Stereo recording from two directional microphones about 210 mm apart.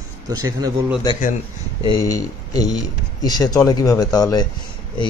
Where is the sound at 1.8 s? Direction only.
20° left (ahead or behind).